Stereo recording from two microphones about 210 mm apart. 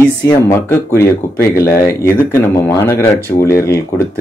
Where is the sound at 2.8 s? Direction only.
15° left (ahead or behind).